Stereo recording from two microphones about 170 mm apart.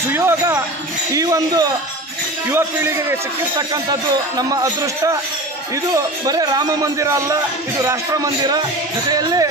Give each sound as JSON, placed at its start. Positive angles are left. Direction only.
{"t": 0.1, "sound": "a man's voice", "side_deg": -15}